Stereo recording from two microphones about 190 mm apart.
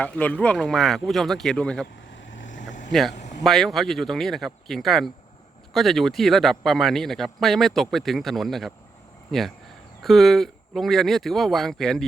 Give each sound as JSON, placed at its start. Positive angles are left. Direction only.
{"t": 0.0, "sound": "speech", "side_deg": 5}
{"t": 2.5, "sound": "a sound", "side_deg": 40}
{"t": 2.9, "sound": "speech", "side_deg": 0}
{"t": 3.2, "sound": "vehicle", "side_deg": 40}
{"t": 3.4, "sound": "speech", "side_deg": 0}
{"t": 10.0, "sound": "speech", "side_deg": 0}